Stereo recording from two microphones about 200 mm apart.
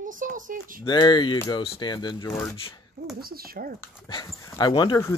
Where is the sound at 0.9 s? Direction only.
20° left (ahead or behind).